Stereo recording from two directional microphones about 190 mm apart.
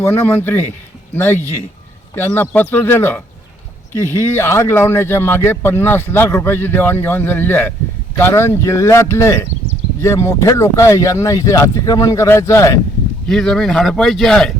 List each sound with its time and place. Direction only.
0.0 s a man's voice: 10° left (ahead or behind)
13.2 s speech: 5° left (ahead or behind)